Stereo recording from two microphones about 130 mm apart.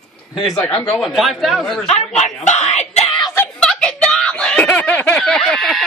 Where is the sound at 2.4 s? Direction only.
60° left (ahead or behind).